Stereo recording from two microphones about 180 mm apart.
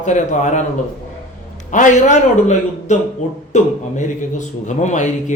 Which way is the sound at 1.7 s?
45° left (ahead or behind).